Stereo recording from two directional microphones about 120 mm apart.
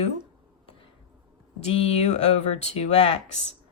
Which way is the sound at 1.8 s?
65° left (ahead or behind).